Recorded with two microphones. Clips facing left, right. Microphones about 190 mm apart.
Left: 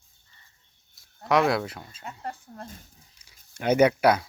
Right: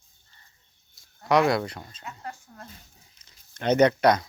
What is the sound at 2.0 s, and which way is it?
Speech, 35° left (ahead or behind).